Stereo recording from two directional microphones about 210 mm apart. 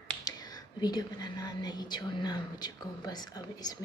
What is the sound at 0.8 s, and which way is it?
Speech, 20° left (ahead or behind).